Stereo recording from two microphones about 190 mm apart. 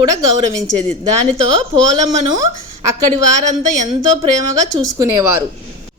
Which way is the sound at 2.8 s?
15° right (ahead or behind).